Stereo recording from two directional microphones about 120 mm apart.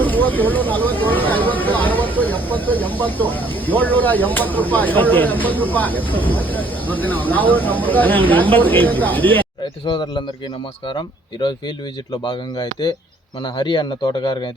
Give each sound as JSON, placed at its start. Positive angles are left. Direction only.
{"t": 0.0, "sound": "speech", "side_deg": 15}
{"t": 9.8, "sound": "speech", "side_deg": 40}